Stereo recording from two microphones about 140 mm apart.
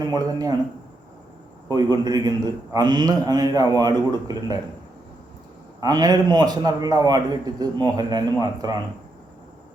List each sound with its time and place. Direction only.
0.1 s a man's voice: 25° right (ahead or behind)
1.6 s a man's voice: 30° right (ahead or behind)
5.8 s a man's voice: 25° right (ahead or behind)